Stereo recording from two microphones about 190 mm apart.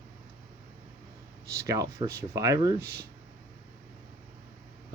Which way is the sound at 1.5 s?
15° right (ahead or behind).